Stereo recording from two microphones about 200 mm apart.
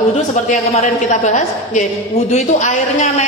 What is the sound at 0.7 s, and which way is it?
A man's voice, 35° left (ahead or behind).